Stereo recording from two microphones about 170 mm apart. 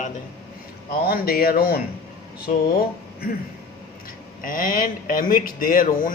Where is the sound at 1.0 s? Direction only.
60° left (ahead or behind).